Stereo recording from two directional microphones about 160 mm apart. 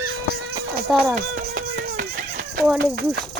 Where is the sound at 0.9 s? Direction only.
Centre (ahead or behind).